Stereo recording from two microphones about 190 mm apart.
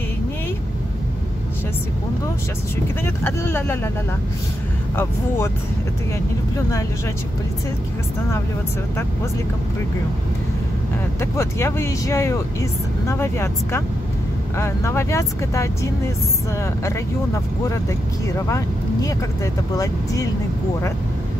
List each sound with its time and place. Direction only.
3.3 s speech: 10° left (ahead or behind)
11.1 s speech: 15° left (ahead or behind)
18.3 s speech: 15° left (ahead or behind)